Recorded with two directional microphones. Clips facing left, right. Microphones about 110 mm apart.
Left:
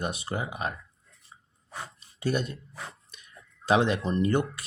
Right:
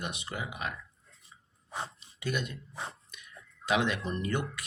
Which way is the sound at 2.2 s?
35° left (ahead or behind).